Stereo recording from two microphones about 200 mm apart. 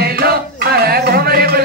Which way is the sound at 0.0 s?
50° right (ahead or behind).